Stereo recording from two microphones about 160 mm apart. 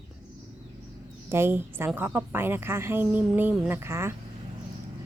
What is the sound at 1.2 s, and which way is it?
A woman's voice, 15° right (ahead or behind).